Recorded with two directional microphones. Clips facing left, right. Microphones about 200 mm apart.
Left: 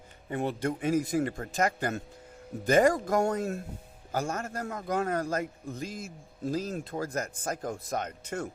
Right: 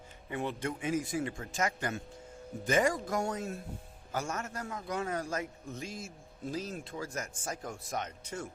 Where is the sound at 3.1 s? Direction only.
55° left (ahead or behind).